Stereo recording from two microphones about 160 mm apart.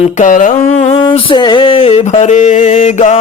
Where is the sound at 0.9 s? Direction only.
30° left (ahead or behind).